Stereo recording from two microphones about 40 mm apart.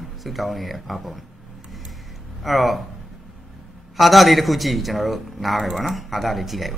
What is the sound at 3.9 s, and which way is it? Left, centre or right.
A man's voice, centre.